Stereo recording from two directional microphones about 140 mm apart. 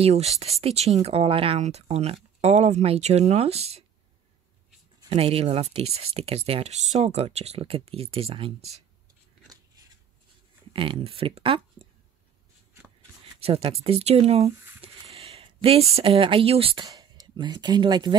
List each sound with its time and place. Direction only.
0.0 s speech: 50° right (ahead or behind)
5.1 s speech: 45° right (ahead or behind)
10.7 s speech: 40° right (ahead or behind)
13.4 s speech: 45° right (ahead or behind)
14.8 s a sound: 45° right (ahead or behind)
16.8 s speech: 25° right (ahead or behind)